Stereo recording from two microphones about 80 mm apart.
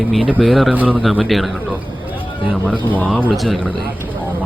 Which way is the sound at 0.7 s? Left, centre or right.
Right.